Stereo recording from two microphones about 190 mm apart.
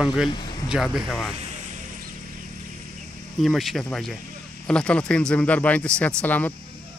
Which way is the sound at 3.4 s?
Centre (ahead or behind).